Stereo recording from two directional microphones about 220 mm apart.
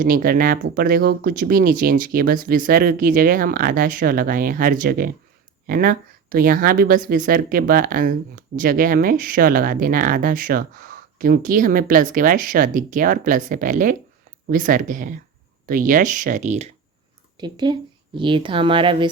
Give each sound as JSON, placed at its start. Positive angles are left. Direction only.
{"t": 0.0, "sound": "speech", "side_deg": -40}
{"t": 17.3, "sound": "a woman's voice", "side_deg": -20}